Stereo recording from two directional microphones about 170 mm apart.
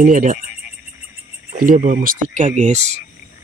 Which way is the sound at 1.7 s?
55° right (ahead or behind).